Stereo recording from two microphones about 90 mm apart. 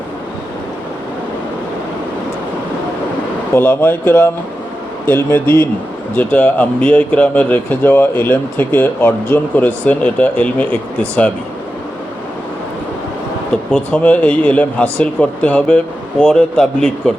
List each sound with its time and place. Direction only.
3.5 s speech: 25° left (ahead or behind)
6.1 s speech: 15° left (ahead or behind)
13.5 s speech: 10° left (ahead or behind)